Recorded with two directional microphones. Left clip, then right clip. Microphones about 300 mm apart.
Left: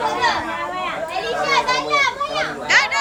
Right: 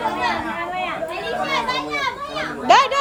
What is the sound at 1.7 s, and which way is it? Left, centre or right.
Children playing, centre.